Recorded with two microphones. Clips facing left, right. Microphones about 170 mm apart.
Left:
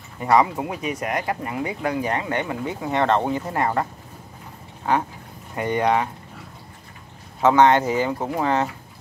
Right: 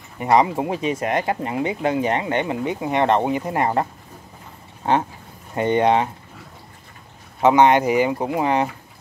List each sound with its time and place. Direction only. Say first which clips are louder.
0.2 s speech: right 1 dB; 20° right (ahead or behind)
4.9 s speech: right 2 dB; 25° right (ahead or behind)
7.4 s speech: right 1 dB; 15° right (ahead or behind)